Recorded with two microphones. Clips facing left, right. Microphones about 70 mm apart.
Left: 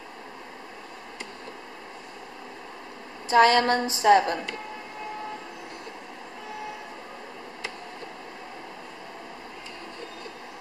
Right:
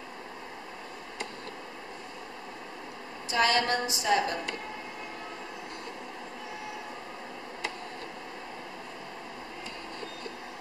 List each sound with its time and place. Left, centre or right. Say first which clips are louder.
3.3 s a woman's voice: left 8 dB; left